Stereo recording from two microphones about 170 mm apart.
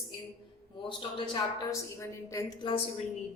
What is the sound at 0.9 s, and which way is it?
A woman's voice, 30° left (ahead or behind).